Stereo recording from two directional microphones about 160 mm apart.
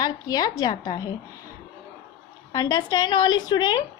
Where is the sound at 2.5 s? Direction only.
25° left (ahead or behind).